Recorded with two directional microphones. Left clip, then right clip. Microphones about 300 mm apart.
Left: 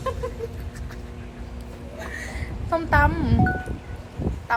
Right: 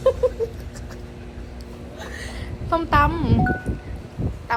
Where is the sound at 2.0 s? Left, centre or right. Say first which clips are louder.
Left 1 dB; centre.